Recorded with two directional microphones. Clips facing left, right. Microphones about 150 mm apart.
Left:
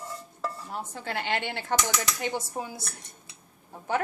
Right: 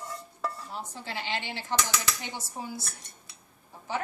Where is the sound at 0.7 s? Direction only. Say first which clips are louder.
Left 4 dB; 55° left (ahead or behind).